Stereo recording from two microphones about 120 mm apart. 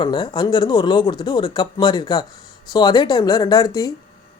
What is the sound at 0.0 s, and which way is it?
Speech, 40° left (ahead or behind).